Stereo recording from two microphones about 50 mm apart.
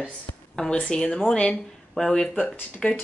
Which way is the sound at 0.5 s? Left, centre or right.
Centre.